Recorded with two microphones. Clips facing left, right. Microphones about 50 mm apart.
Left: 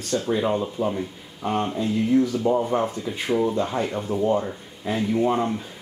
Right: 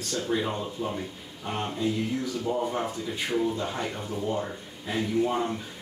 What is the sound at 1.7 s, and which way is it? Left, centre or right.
Speech, left.